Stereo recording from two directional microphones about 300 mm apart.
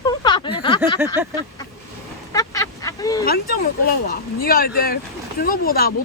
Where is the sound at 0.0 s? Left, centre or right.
Centre.